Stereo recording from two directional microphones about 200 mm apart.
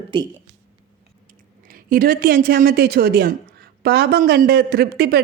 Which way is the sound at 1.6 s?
45° right (ahead or behind).